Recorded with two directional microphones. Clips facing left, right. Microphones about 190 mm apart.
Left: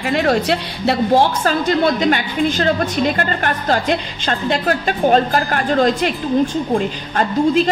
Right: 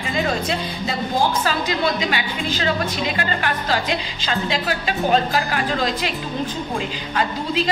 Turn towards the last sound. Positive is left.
turn(degrees=45)  # may be behind; listen again after turning